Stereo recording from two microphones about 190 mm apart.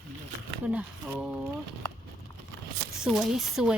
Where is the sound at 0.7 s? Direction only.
5° right (ahead or behind).